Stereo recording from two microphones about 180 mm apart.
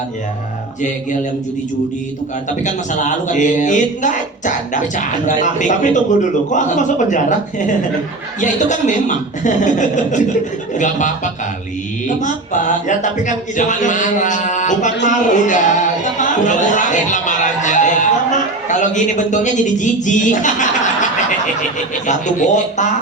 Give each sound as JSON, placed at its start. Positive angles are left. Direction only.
{"t": 2.6, "sound": "speech", "side_deg": 45}
{"t": 8.4, "sound": "speech", "side_deg": 45}
{"t": 15.0, "sound": "music", "side_deg": 45}
{"t": 22.0, "sound": "speech", "side_deg": 45}